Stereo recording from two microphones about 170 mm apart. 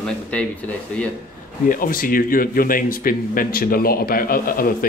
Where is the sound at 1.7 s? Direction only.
55° left (ahead or behind).